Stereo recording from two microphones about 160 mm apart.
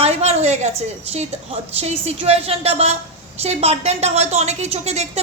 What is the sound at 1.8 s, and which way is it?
A woman's voice, 40° right (ahead or behind).